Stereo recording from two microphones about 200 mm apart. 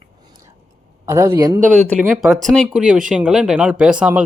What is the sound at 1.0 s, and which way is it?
Speech, 15° right (ahead or behind).